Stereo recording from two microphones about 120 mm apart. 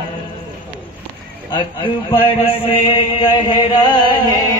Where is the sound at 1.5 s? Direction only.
45° left (ahead or behind).